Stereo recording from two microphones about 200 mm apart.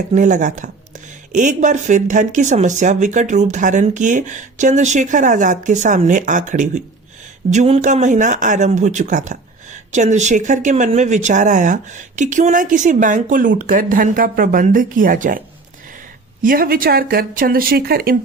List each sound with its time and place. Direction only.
0.1 s speech: 40° right (ahead or behind)
16.4 s speech: 45° right (ahead or behind)